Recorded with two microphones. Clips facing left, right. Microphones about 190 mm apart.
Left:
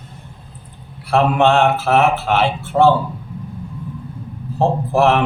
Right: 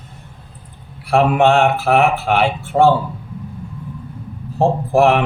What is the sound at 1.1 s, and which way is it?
Speech, 15° right (ahead or behind).